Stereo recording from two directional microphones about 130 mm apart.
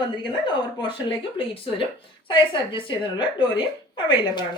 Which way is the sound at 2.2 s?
40° left (ahead or behind).